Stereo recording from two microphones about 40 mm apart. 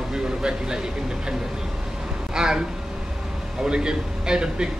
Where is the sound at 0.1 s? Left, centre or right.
Centre.